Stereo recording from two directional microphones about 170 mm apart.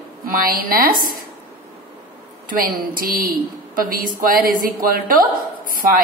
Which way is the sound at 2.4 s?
55° right (ahead or behind).